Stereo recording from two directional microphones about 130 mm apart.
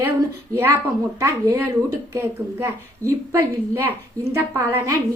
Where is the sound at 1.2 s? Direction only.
20° right (ahead or behind).